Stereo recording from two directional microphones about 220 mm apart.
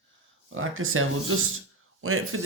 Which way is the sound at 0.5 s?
65° right (ahead or behind).